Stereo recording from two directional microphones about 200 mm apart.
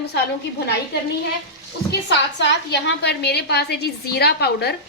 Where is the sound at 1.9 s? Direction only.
60° left (ahead or behind).